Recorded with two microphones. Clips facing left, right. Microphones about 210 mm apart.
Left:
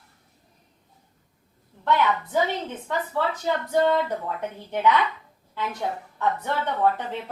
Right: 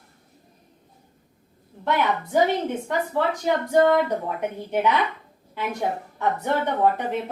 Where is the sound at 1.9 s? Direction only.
15° right (ahead or behind).